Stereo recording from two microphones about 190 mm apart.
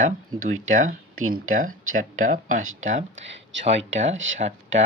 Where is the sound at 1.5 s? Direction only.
45° right (ahead or behind).